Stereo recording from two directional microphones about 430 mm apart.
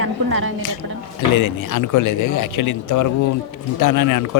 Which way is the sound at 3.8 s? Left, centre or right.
Left.